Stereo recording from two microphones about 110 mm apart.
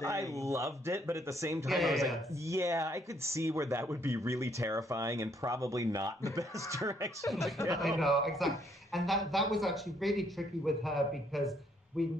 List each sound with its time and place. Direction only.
0.0 s speech: 30° right (ahead or behind)
1.7 s speech: centre (ahead or behind)
2.4 s speech: 25° right (ahead or behind)
7.2 s speech: centre (ahead or behind)